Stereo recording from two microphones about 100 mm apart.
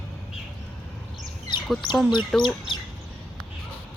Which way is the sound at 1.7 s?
Centre (ahead or behind).